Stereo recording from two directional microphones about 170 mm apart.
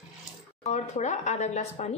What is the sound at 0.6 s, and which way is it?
Speech, 45° left (ahead or behind).